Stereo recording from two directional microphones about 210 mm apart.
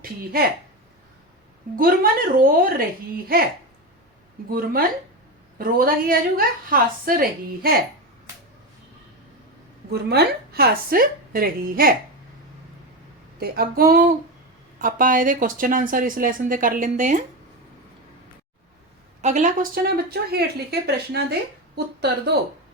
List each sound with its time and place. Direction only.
0.0 s a woman's voice: 45° right (ahead or behind)
1.7 s a woman's voice: 40° right (ahead or behind)
4.4 s a woman's voice: 45° right (ahead or behind)
9.9 s a woman's voice: 50° right (ahead or behind)
13.4 s a woman's voice: 45° right (ahead or behind)
19.2 s a woman's voice: 35° right (ahead or behind)